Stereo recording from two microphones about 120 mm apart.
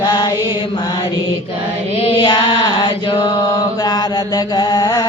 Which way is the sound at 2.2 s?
35° left (ahead or behind).